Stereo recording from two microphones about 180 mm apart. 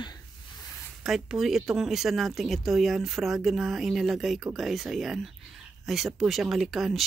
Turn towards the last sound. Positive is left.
turn(degrees=0)  # may be behind; listen again after turning